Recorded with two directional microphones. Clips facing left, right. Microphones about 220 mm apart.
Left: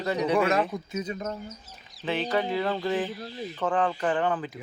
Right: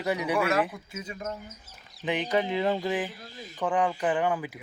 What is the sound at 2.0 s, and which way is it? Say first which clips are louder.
A man's voice: even; 15° right (ahead or behind).